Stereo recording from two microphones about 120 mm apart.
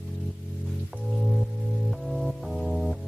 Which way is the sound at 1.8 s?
Centre (ahead or behind).